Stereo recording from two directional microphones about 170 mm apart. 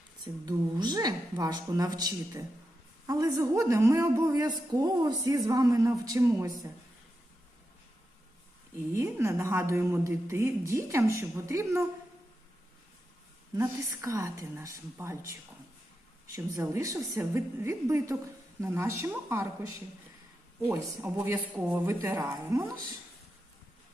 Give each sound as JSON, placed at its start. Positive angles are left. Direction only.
{"t": 0.4, "sound": "a woman's voice", "side_deg": -25}
{"t": 8.9, "sound": "a woman's voice", "side_deg": -15}
{"t": 13.6, "sound": "a woman's voice", "side_deg": -15}